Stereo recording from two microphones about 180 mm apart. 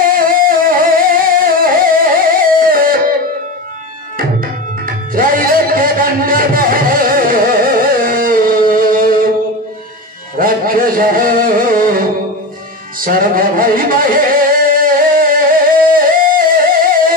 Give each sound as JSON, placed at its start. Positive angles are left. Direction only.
{"t": 0.0, "sound": "music", "side_deg": -50}
{"t": 4.8, "sound": "music", "side_deg": -50}
{"t": 10.3, "sound": "music", "side_deg": -50}